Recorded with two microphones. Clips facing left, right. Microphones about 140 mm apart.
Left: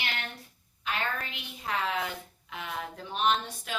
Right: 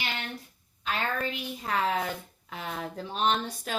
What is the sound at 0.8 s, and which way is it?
A woman's voice, 40° right (ahead or behind).